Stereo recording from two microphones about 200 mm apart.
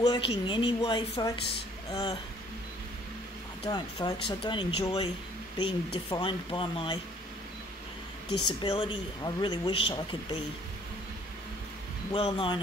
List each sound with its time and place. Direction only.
0.0 s a man's voice: 20° left (ahead or behind)
3.6 s a man's voice: 20° left (ahead or behind)
8.5 s a man's voice: 25° left (ahead or behind)
12.1 s a man's voice: 25° left (ahead or behind)